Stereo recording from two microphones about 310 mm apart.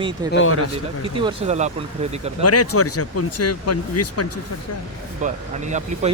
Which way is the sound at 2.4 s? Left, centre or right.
Left.